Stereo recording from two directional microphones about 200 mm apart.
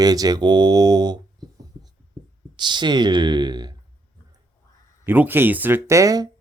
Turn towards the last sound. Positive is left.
turn(degrees=-15)  # may be behind; listen again after turning